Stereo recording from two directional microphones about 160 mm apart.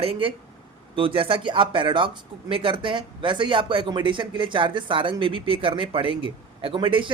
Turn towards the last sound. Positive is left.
turn(degrees=-30)  # may be behind; listen again after turning